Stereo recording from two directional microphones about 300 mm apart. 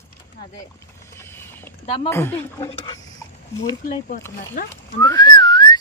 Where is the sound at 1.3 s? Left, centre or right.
Centre.